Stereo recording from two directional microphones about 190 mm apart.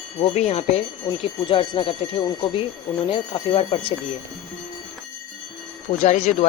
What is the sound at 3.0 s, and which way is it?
Speech, 30° left (ahead or behind).